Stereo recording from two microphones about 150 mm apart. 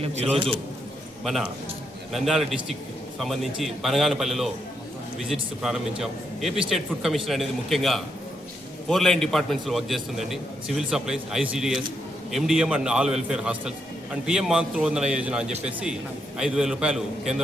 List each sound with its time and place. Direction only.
0.0 s a man's voice: 45° right (ahead or behind)
2.1 s a man's voice: centre (ahead or behind)